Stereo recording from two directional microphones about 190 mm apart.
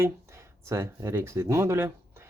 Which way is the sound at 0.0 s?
15° right (ahead or behind).